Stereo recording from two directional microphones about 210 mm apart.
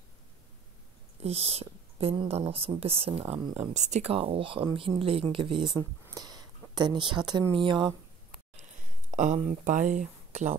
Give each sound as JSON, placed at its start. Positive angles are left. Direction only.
{"t": 1.2, "sound": "speech", "side_deg": -30}
{"t": 9.1, "sound": "speech", "side_deg": -35}